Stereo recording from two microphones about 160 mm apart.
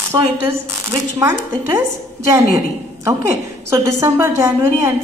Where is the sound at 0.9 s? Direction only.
20° right (ahead or behind).